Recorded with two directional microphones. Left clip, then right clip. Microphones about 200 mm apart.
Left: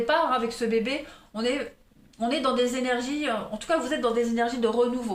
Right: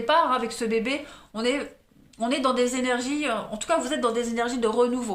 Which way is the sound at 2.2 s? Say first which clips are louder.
Right 1 dB; 35° right (ahead or behind).